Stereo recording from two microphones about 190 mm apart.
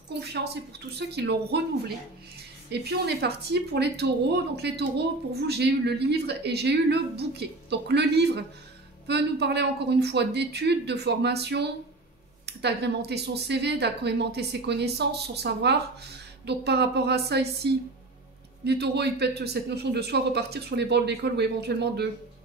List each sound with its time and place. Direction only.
0.2 s speech: 60° right (ahead or behind)
2.7 s speech: 60° right (ahead or behind)